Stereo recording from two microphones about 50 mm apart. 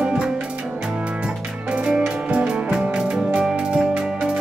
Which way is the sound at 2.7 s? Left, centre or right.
Centre.